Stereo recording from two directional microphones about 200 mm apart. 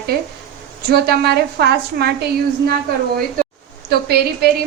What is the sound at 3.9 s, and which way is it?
Speech, 50° right (ahead or behind).